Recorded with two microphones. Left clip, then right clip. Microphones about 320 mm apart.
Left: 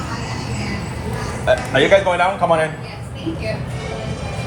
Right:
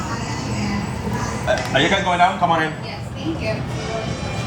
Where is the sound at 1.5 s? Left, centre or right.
Centre.